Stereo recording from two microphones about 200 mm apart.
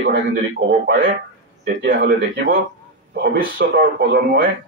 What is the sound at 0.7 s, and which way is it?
Speech, 60° right (ahead or behind).